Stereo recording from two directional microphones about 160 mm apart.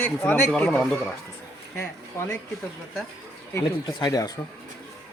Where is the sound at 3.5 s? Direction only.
25° left (ahead or behind).